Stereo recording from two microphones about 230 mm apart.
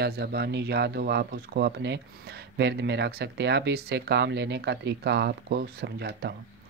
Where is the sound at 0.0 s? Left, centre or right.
Right.